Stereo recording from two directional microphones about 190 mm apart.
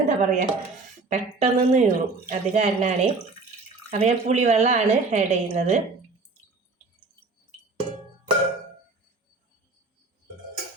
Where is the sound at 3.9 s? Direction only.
35° right (ahead or behind).